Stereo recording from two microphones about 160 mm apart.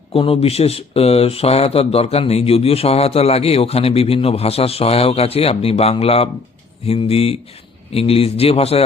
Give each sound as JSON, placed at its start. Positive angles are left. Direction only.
{"t": 0.1, "sound": "speech", "side_deg": 35}